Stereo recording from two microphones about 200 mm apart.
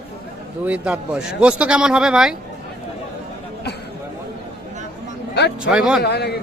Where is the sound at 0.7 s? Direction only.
5° right (ahead or behind).